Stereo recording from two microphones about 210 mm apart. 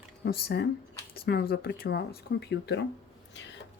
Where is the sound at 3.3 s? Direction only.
60° left (ahead or behind).